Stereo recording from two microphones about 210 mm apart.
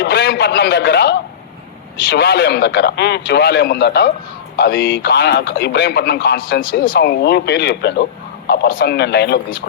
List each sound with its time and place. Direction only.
0.0 s a man's voice: 50° left (ahead or behind)